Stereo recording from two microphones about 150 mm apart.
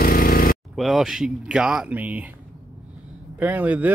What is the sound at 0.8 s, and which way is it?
Speech, centre (ahead or behind).